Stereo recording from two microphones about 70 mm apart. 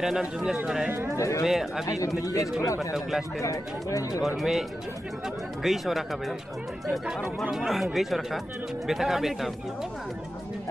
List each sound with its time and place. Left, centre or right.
0.0 s speech: centre
1.1 s speech: left
1.4 s speech: centre
2.2 s speech: left
2.9 s speech: centre
3.3 s speech: left
4.4 s speech: centre